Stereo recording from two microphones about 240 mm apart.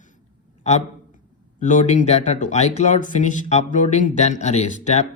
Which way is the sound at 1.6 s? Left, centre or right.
Left.